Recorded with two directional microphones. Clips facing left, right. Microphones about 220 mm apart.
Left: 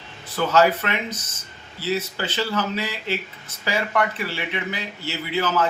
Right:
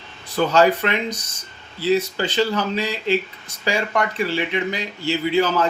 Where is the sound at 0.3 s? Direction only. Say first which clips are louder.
Right 2 dB; 15° right (ahead or behind).